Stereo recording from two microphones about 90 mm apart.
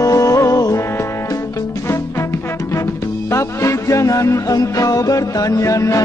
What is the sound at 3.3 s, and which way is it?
Music, 35° left (ahead or behind).